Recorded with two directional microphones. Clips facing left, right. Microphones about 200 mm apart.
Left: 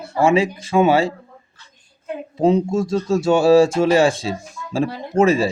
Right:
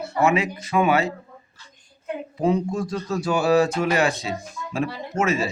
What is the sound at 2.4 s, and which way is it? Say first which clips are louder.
Speech: left 6 dB; 25° left (ahead or behind).